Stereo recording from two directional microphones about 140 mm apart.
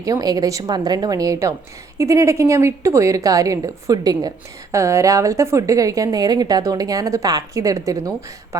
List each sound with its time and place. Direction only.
0.0 s a woman's voice: 25° right (ahead or behind)